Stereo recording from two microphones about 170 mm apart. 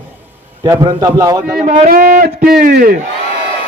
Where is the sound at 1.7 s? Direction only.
50° right (ahead or behind).